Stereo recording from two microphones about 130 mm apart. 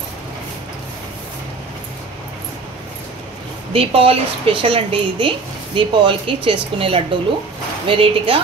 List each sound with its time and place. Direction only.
3.7 s a woman's voice: 45° right (ahead or behind)